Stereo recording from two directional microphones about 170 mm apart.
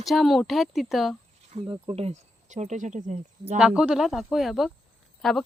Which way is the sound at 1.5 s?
35° right (ahead or behind).